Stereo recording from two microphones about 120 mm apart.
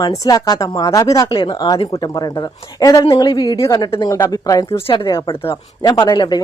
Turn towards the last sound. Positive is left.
turn(degrees=35)  # may be behind; listen again after turning